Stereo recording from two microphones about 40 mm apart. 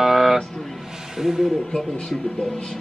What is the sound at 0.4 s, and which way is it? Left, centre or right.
Music, centre.